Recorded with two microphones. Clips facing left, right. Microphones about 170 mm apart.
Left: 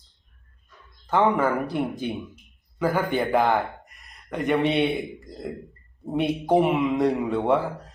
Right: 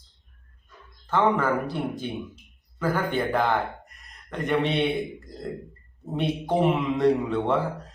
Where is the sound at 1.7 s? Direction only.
20° left (ahead or behind).